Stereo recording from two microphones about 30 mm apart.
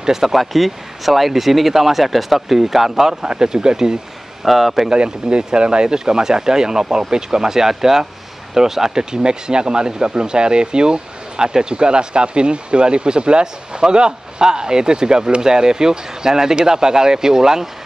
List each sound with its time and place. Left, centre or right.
0.0 s speech: centre
0.4 s speech: centre
3.1 s speech: right
4.5 s speech: centre
4.8 s speech: right
5.9 s speech: right